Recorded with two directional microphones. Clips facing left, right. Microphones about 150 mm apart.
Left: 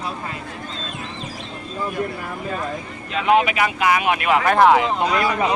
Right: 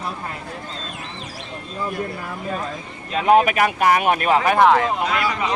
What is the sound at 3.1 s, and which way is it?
Speech, 40° right (ahead or behind).